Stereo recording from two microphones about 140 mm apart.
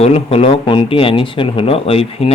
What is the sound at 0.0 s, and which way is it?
Speech, 45° left (ahead or behind).